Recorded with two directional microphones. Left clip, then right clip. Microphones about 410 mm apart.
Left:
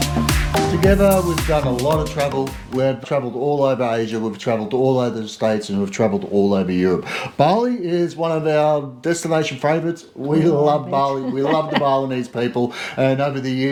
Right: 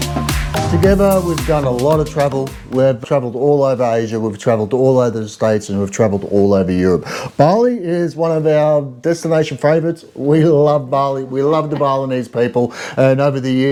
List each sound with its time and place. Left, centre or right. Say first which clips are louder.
0.0 s music: even; centre
0.9 s speech: right 3 dB; right
1.7 s speech: right 5 dB; centre
2.7 s speech: right 6 dB; right